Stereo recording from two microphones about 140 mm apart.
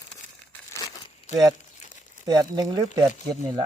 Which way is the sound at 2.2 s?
30° right (ahead or behind).